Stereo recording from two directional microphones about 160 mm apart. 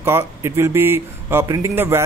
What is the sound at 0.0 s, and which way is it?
Speech, 15° right (ahead or behind).